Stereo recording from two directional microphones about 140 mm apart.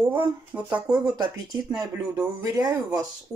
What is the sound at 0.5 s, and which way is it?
Speech, 15° right (ahead or behind).